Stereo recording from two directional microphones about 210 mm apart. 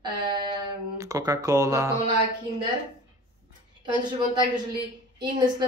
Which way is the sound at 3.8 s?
20° right (ahead or behind).